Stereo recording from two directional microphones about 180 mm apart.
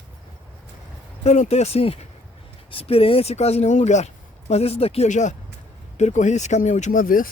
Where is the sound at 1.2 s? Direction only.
35° left (ahead or behind).